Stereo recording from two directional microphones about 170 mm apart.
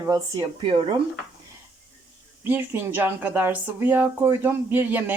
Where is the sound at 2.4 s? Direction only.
10° right (ahead or behind).